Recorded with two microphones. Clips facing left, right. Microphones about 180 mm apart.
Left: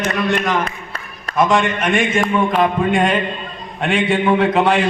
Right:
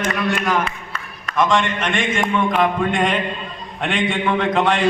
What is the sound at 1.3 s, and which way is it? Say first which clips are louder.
A man's voice: left 3 dB; 10° left (ahead or behind).